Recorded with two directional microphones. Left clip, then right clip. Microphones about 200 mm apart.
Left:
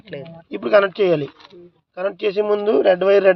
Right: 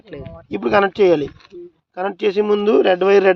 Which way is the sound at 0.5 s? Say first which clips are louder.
Left 1 dB; 50° right (ahead or behind).